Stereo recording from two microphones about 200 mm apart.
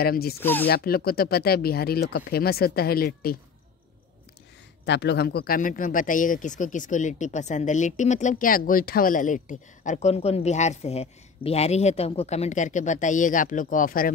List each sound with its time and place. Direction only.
0.0 s speech: 50° left (ahead or behind)
0.4 s speech: 10° left (ahead or behind)
0.7 s speech: 50° left (ahead or behind)
4.8 s speech: 60° left (ahead or behind)